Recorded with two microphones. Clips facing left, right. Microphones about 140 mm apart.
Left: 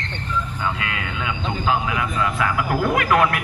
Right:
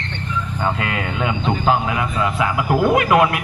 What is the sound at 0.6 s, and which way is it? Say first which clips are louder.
Speech: right 4 dB; 35° right (ahead or behind).